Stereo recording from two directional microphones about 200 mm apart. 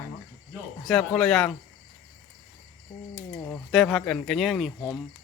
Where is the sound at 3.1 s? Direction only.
15° left (ahead or behind).